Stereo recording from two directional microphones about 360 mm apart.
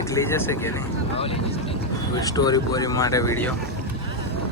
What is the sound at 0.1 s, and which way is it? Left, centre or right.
Speech, centre.